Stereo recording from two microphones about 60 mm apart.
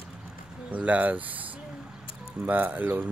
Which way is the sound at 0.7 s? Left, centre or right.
Right.